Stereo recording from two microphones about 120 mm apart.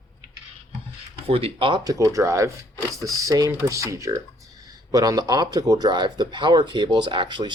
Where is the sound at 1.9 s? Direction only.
30° right (ahead or behind).